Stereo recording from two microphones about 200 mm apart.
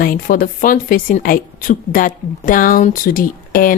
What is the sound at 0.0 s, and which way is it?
Speech, 45° left (ahead or behind).